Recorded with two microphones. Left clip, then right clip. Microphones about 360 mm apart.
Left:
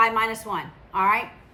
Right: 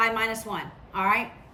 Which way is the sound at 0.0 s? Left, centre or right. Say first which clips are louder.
Left 4 dB; centre.